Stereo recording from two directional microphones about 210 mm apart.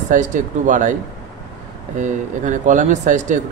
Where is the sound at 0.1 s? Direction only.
35° right (ahead or behind).